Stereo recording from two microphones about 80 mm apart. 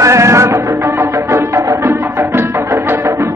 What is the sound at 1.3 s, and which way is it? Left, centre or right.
Music, right.